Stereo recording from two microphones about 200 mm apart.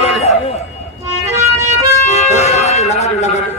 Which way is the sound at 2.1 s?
35° left (ahead or behind).